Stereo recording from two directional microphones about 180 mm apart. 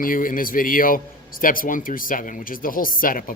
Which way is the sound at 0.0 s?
50° left (ahead or behind).